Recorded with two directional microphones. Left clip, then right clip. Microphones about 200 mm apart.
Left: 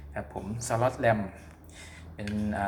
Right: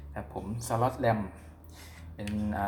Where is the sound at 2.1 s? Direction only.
5° left (ahead or behind).